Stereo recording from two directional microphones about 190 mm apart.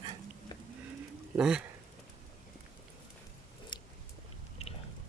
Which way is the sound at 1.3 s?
5° right (ahead or behind).